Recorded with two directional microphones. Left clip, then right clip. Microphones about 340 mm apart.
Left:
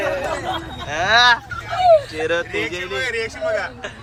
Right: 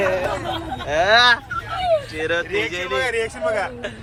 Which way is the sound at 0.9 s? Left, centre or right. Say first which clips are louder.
Right 1 dB; centre.